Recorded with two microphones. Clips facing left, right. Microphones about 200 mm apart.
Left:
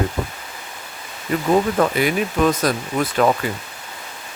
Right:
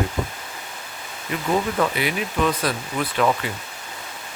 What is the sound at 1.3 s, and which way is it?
Speech, 40° left (ahead or behind).